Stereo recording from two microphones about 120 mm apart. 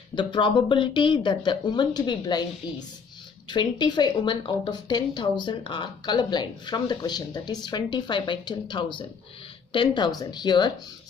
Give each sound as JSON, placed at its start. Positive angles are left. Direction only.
{"t": 0.1, "sound": "a woman's voice", "side_deg": 40}
{"t": 3.4, "sound": "a woman's voice", "side_deg": 40}